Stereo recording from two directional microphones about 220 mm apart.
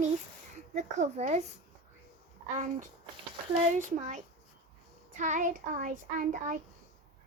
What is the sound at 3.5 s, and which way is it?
A child's voice, 30° right (ahead or behind).